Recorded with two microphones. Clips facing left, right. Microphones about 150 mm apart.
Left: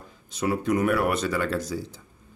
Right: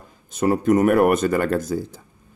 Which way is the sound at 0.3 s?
50° right (ahead or behind).